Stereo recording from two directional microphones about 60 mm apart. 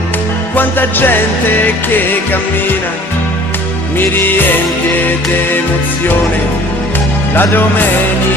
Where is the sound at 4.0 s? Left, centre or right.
Left.